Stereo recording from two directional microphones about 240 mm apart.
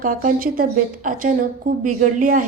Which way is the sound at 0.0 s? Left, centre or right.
Right.